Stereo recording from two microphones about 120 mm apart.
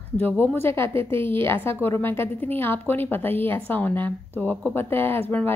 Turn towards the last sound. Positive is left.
turn(degrees=15)  # may be behind; listen again after turning